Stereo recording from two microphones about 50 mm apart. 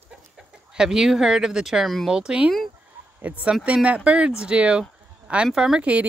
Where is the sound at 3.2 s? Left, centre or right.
Right; by 5.8 s centre.